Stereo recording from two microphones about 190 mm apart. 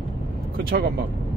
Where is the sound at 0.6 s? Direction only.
55° right (ahead or behind).